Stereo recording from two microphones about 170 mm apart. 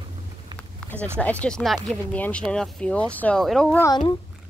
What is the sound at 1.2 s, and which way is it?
Speech, 10° left (ahead or behind).